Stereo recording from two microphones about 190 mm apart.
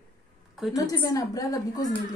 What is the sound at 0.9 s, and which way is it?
A woman's voice, 20° left (ahead or behind).